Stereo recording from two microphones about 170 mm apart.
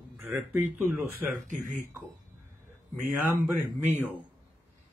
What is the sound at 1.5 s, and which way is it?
Speech, 50° right (ahead or behind).